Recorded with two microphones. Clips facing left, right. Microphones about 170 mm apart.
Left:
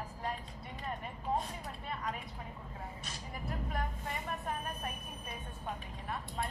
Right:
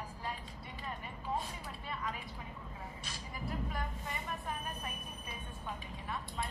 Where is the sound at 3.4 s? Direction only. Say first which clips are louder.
Left 1 dB; 50° left (ahead or behind).